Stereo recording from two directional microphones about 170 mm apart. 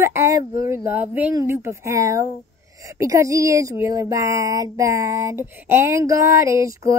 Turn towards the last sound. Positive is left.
turn(degrees=-20)  # may be behind; listen again after turning